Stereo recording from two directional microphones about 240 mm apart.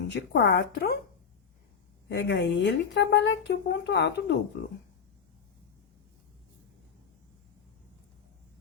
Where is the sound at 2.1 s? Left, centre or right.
Left.